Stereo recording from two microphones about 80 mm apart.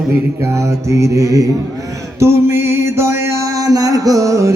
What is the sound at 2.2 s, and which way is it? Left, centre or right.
Music, right.